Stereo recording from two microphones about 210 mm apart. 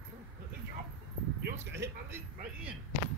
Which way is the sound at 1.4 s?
50° right (ahead or behind).